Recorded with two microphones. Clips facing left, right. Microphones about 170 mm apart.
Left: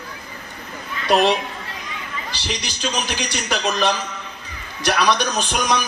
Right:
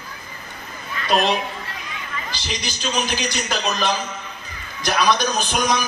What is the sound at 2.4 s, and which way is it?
A man's voice, 70° left (ahead or behind).